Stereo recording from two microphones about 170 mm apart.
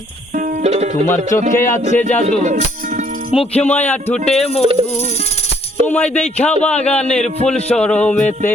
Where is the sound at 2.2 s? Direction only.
45° right (ahead or behind).